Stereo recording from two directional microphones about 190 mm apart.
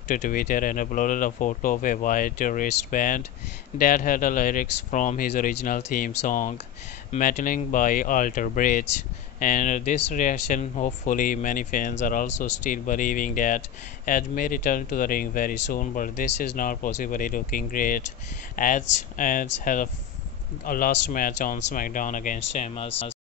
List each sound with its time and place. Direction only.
0.1 s speech: 45° left (ahead or behind); by 23.1 s 30° left (ahead or behind)